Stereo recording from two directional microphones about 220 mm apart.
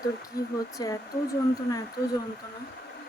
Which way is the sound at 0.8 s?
15° left (ahead or behind).